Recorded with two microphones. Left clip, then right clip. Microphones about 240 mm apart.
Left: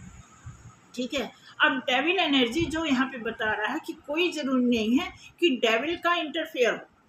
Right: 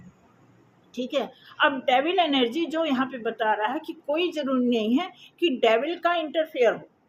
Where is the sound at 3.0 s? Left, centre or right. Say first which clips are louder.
Right 2 dB; left.